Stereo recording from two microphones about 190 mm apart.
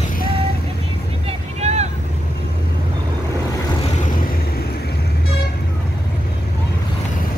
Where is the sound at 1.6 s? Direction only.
35° right (ahead or behind).